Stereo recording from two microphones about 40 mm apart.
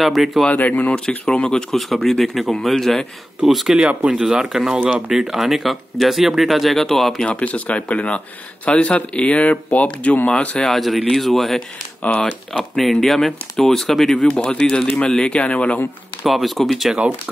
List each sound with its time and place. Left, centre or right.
0.0 s speech: centre
0.5 s speech: left
0.9 s speech: left
1.7 s speech: centre
3.4 s speech: centre
3.7 s speech: right; by 6.9 s centre
6.9 s speech: centre
7.2 s speech: left
10.7 s speech: centre
12.0 s speech: left
12.7 s speech: centre
14.7 s speech: centre
15.3 s speech: left
16.3 s speech: centre